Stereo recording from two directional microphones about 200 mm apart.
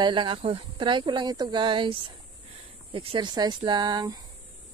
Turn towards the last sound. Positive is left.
turn(degrees=-20)  # may be behind; listen again after turning